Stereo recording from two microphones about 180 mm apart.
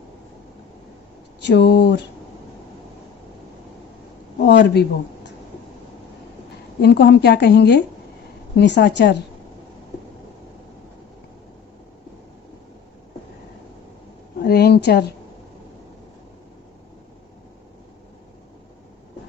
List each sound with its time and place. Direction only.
1.5 s a woman's voice: 70° left (ahead or behind)
4.4 s speech: 70° left (ahead or behind)
6.8 s a woman's voice: 70° left (ahead or behind)
14.4 s a sound: 65° left (ahead or behind)